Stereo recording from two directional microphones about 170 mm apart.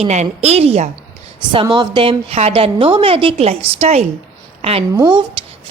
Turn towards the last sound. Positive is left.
turn(degrees=-25)  # may be behind; listen again after turning